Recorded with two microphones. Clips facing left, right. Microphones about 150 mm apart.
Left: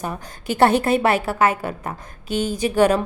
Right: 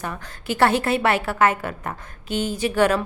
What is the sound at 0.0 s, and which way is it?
A woman's voice, 15° left (ahead or behind).